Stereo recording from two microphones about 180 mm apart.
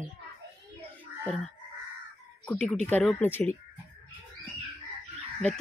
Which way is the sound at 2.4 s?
5° left (ahead or behind).